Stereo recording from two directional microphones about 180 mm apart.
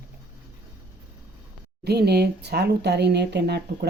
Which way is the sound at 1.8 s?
65° right (ahead or behind).